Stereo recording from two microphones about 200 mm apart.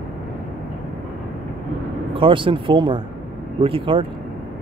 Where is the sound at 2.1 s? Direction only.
25° right (ahead or behind).